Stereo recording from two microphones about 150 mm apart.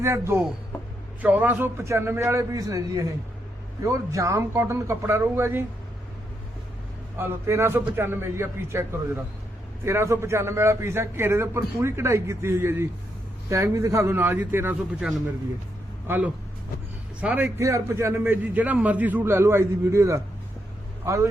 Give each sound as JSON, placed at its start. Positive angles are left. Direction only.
{"t": 0.0, "sound": "a man's voice", "side_deg": -20}
{"t": 7.2, "sound": "a man's voice", "side_deg": -15}
{"t": 16.0, "sound": "a man's voice", "side_deg": -10}